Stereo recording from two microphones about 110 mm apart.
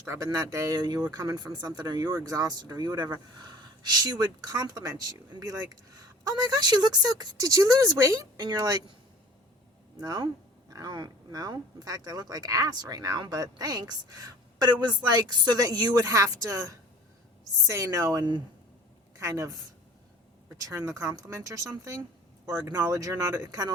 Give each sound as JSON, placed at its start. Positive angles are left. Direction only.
{"t": 0.0, "sound": "speech", "side_deg": -30}
{"t": 10.0, "sound": "speech", "side_deg": -35}
{"t": 19.1, "sound": "a woman's voice", "side_deg": -30}